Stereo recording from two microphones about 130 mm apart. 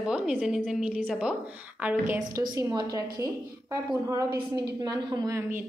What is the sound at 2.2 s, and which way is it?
A woman's voice, 35° right (ahead or behind).